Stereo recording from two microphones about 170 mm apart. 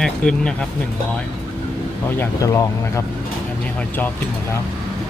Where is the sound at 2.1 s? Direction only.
15° left (ahead or behind).